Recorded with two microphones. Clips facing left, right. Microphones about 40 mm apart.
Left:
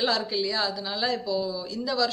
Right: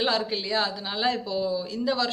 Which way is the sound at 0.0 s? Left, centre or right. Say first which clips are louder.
Even; right.